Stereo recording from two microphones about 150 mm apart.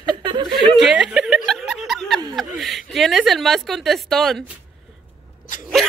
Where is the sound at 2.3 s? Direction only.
Centre (ahead or behind).